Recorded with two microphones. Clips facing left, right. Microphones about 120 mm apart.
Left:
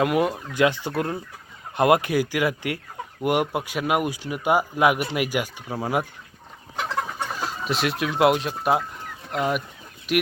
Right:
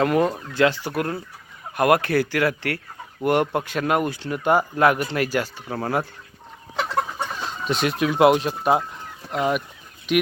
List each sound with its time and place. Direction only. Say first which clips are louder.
0.0 s speech: right 2 dB; 10° left (ahead or behind)
7.3 s speech: right 1 dB; 5° left (ahead or behind)